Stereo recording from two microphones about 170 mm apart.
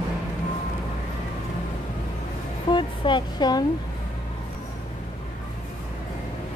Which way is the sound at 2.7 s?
25° left (ahead or behind).